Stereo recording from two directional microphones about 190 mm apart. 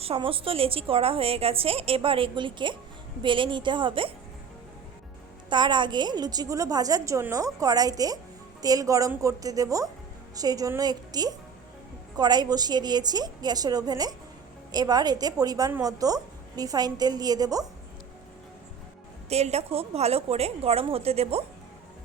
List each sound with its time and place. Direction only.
0.0 s a woman's voice: 30° right (ahead or behind)
5.5 s a woman's voice: 25° right (ahead or behind)
19.3 s a woman's voice: 35° right (ahead or behind)